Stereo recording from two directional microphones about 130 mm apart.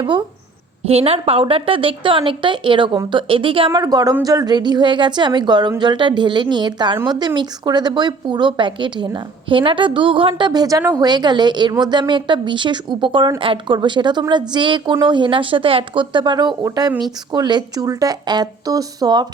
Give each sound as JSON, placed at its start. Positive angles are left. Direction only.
{"t": 0.9, "sound": "a woman's voice", "side_deg": -50}
{"t": 3.7, "sound": "a woman's voice", "side_deg": -30}